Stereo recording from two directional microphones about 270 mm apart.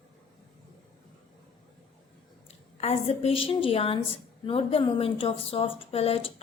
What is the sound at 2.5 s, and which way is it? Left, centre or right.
A woman's voice, left.